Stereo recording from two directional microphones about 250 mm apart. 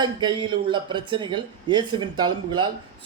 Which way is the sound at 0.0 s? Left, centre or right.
Centre.